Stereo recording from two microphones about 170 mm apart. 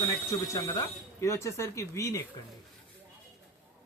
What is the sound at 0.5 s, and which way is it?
Speech, 20° left (ahead or behind).